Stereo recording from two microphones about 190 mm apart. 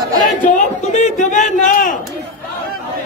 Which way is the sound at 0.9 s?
40° left (ahead or behind).